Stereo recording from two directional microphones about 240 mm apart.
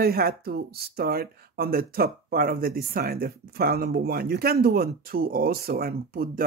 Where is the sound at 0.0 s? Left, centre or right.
Right.